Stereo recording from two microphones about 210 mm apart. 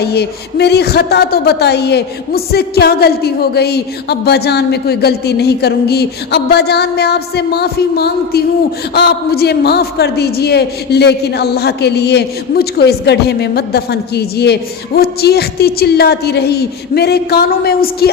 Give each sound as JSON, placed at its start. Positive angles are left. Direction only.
{"t": 0.0, "sound": "a man's voice", "side_deg": 50}